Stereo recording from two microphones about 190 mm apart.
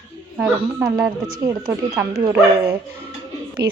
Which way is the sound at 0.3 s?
5° right (ahead or behind).